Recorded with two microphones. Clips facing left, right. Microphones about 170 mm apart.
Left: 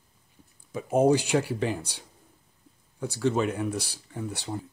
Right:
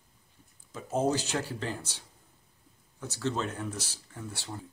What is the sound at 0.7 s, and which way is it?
Speech, 15° left (ahead or behind).